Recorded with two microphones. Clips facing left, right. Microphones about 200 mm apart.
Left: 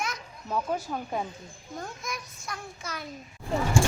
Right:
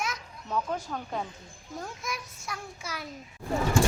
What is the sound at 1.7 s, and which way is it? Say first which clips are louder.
A child's voice: even; 5° right (ahead or behind).